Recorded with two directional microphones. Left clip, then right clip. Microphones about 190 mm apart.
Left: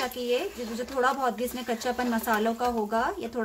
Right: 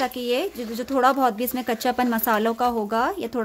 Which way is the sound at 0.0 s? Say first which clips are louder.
Right 4 dB; 50° right (ahead or behind).